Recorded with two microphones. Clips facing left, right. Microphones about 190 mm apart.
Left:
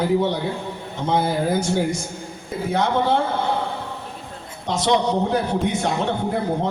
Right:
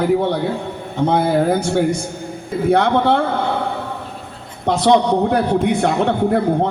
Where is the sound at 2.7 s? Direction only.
60° right (ahead or behind).